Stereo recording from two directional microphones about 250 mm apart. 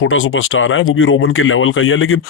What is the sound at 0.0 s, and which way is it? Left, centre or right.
Speech, left.